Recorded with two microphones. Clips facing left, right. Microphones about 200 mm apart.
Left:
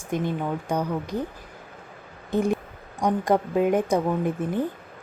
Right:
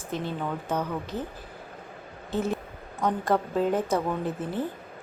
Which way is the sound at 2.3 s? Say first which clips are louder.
Left 5 dB; 15° left (ahead or behind).